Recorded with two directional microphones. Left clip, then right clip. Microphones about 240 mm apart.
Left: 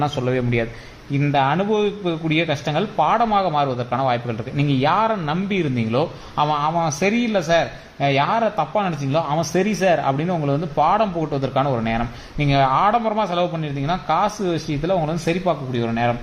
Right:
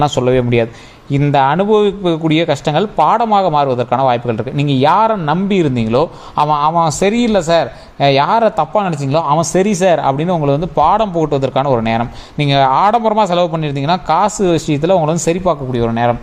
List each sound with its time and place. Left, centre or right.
0.0 s a man's voice: right